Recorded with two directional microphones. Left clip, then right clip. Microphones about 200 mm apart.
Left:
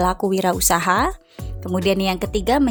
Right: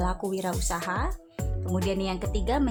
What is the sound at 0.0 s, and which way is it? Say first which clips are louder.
A woman's voice: left 11 dB; 35° left (ahead or behind).